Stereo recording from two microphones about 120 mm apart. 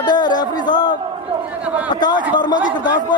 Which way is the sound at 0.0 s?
35° left (ahead or behind).